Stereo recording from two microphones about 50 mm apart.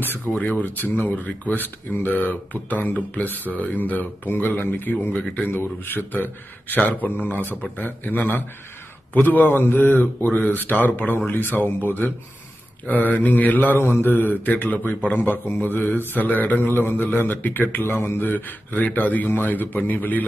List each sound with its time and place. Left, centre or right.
0.4 s speech: left